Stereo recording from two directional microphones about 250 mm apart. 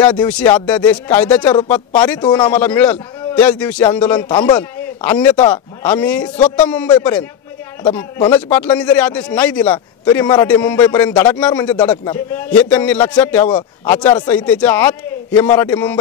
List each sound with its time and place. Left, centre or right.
0.0 s a man's voice: centre
2.1 s speech: centre
2.5 s a man's voice: centre
8.3 s a man's voice: centre
10.0 s a man's voice: centre
10.4 s a man's voice: centre